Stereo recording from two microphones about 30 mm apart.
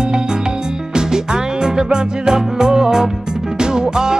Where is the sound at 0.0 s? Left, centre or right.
Right.